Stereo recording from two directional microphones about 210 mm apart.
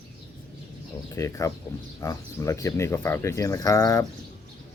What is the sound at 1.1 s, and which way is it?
Speech, 15° left (ahead or behind).